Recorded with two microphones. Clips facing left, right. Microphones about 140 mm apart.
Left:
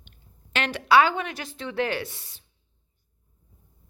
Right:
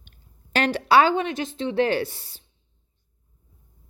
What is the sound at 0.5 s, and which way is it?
Speech, 35° right (ahead or behind).